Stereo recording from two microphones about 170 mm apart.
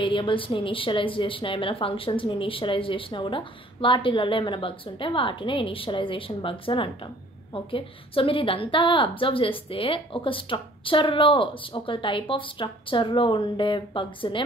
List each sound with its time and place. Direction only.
0.0 s a woman's voice: 30° left (ahead or behind)